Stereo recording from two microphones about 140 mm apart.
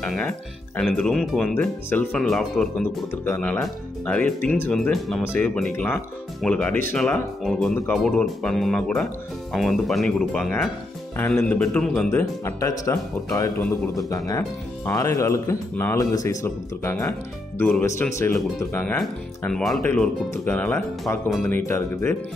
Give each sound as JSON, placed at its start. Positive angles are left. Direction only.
{"t": 0.0, "sound": "speech", "side_deg": 5}
{"t": 1.5, "sound": "speech", "side_deg": 15}
{"t": 18.1, "sound": "speech", "side_deg": 20}
{"t": 18.9, "sound": "speech", "side_deg": 5}